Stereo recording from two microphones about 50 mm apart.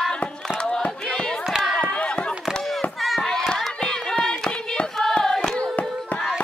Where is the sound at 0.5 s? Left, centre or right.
Centre.